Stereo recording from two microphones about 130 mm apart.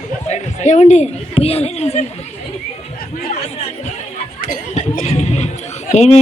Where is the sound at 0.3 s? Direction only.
65° left (ahead or behind).